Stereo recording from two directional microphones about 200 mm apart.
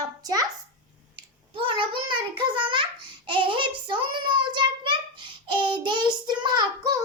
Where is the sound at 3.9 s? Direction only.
25° right (ahead or behind).